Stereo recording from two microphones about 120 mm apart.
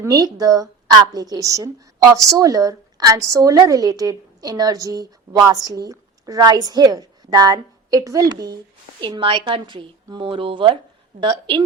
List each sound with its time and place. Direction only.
0.1 s a woman's voice: 30° right (ahead or behind)